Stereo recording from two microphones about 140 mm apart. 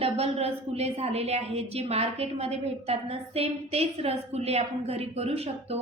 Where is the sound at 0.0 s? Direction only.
45° right (ahead or behind).